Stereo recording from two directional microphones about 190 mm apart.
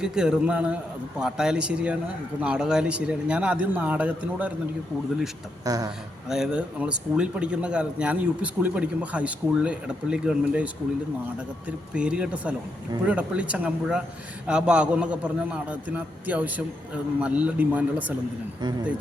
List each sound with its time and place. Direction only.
0.0 s a man's voice: 5° right (ahead or behind)
5.6 s speech: 20° right (ahead or behind)
6.2 s a man's voice: 5° right (ahead or behind)
11.9 s a man's voice: 5° right (ahead or behind)